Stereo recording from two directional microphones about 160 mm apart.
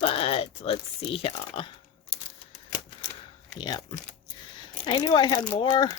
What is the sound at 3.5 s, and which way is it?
Speech, 25° left (ahead or behind).